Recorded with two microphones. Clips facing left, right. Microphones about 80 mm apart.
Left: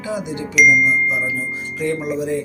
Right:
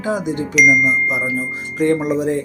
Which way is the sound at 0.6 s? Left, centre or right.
Centre.